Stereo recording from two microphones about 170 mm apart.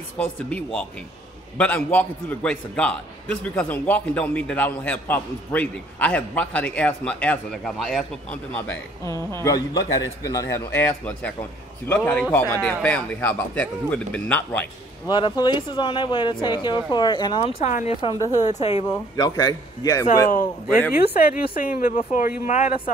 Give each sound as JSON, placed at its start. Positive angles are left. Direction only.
{"t": 0.2, "sound": "a man's voice", "side_deg": 10}
{"t": 8.5, "sound": "a man's voice", "side_deg": 15}
{"t": 15.0, "sound": "speech", "side_deg": 25}
{"t": 17.6, "sound": "speech", "side_deg": 45}
{"t": 18.0, "sound": "speech", "side_deg": 25}
{"t": 18.4, "sound": "a woman's voice", "side_deg": 40}
{"t": 18.9, "sound": "speech", "side_deg": 25}
{"t": 20.9, "sound": "speech", "side_deg": 60}